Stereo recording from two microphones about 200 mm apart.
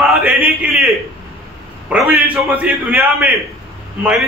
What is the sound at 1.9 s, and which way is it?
A man's voice, 10° right (ahead or behind).